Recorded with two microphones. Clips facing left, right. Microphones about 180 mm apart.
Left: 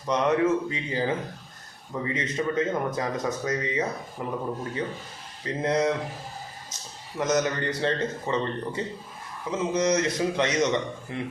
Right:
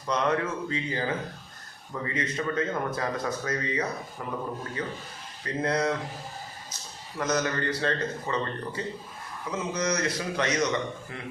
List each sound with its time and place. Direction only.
0.0 s speech: 20° left (ahead or behind)
5.6 s speech: 20° left (ahead or behind)
7.2 s speech: 20° left (ahead or behind)